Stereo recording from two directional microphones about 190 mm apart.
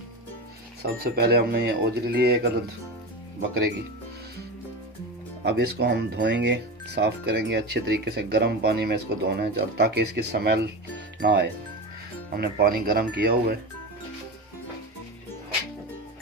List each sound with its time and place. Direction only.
0.8 s speech: 55° right (ahead or behind)
5.4 s speech: 60° right (ahead or behind)